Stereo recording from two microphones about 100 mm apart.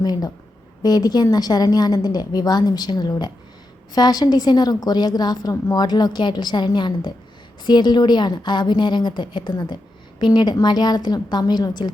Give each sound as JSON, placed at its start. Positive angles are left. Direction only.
{"t": 0.0, "sound": "a woman's voice", "side_deg": 40}